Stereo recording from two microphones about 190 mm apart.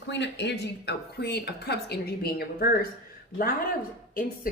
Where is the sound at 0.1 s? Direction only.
65° left (ahead or behind).